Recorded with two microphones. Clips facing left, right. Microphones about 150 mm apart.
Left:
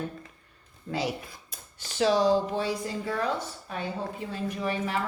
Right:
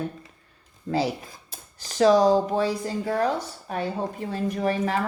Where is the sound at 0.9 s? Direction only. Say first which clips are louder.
Right 5 dB; 35° right (ahead or behind).